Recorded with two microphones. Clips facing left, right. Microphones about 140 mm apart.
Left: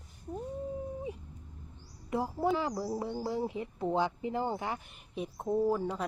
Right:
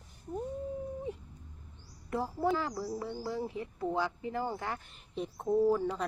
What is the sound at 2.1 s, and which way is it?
Speech, 15° left (ahead or behind).